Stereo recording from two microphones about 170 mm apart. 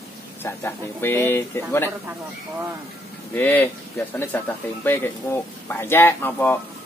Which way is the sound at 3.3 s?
10° left (ahead or behind).